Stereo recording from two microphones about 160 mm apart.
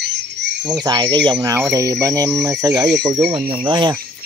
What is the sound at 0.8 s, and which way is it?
Speech, 25° right (ahead or behind).